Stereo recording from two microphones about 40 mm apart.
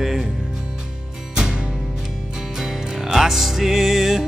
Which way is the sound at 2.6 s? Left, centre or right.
Centre.